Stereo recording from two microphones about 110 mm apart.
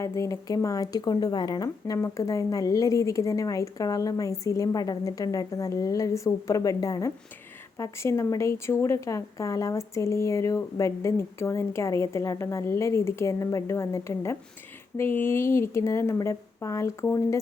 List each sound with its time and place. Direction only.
0.0 s speech: 25° left (ahead or behind)